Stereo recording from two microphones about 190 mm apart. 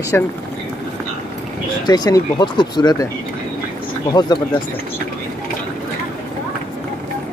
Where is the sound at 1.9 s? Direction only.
20° left (ahead or behind).